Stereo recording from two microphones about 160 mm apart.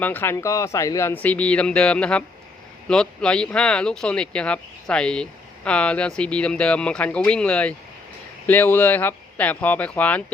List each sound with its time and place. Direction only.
0.0 s speech: 10° left (ahead or behind)